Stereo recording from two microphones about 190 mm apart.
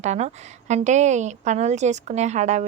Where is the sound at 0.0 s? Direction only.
35° right (ahead or behind).